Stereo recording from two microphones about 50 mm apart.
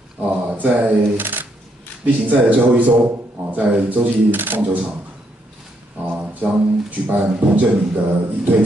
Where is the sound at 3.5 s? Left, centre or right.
Right.